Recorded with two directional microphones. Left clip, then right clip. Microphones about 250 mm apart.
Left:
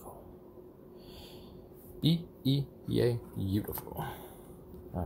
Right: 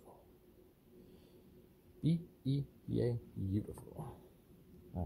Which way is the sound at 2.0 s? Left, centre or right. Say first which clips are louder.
Left 8 dB; centre.